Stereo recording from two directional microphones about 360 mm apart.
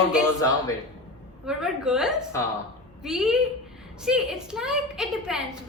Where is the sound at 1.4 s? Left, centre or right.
Centre.